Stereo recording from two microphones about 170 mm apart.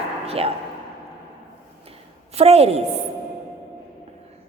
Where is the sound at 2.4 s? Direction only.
35° right (ahead or behind).